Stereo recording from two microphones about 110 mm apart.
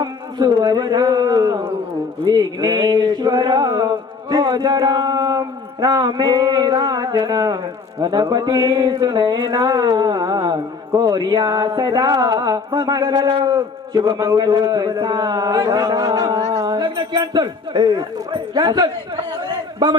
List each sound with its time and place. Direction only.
0.0 s a sound: 40° right (ahead or behind)
8.0 s a man's voice: 40° right (ahead or behind)
13.6 s a man's voice: 35° right (ahead or behind)